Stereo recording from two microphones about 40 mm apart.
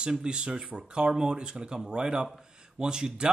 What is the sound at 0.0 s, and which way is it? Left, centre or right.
Speech, right.